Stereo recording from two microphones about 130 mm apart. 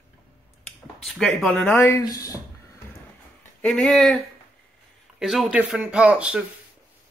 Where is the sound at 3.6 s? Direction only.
5° left (ahead or behind).